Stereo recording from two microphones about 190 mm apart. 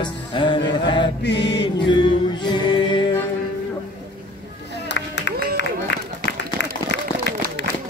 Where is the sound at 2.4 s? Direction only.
25° left (ahead or behind).